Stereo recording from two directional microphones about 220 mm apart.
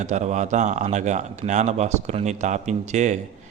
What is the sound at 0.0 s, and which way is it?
A man's voice, 35° right (ahead or behind).